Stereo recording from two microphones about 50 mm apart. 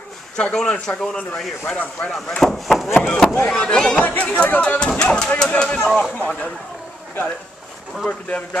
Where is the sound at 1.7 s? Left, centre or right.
Left.